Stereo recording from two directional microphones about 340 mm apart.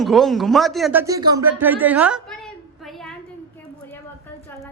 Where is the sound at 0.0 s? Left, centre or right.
Centre.